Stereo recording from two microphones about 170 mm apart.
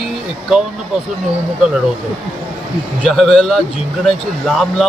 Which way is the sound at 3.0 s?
Centre (ahead or behind).